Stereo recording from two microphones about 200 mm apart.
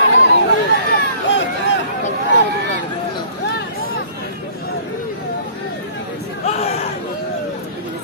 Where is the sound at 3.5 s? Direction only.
50° left (ahead or behind).